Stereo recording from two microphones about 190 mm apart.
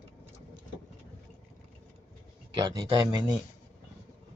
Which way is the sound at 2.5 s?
25° right (ahead or behind).